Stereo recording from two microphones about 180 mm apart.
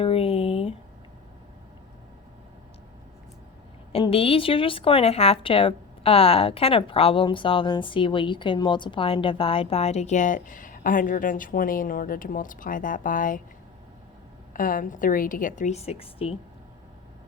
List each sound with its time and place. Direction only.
0.0 s a sound: 35° left (ahead or behind)
3.9 s speech: 30° left (ahead or behind); by 13.4 s 45° left (ahead or behind)
14.5 s a woman's voice: 50° left (ahead or behind); by 16.3 s 30° left (ahead or behind)